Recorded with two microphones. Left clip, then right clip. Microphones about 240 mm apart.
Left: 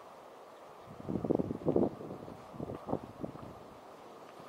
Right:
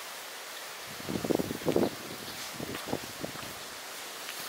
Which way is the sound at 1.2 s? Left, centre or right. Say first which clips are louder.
Right 2 dB; left.